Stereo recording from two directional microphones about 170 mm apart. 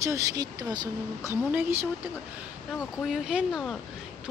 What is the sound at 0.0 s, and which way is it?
A woman's voice, 20° right (ahead or behind).